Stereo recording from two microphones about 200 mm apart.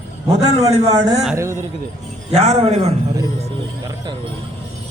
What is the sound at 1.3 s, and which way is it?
Speech, 15° right (ahead or behind).